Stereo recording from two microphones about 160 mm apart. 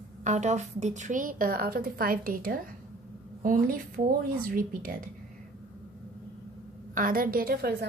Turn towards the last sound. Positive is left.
turn(degrees=-65)  # may be behind; listen again after turning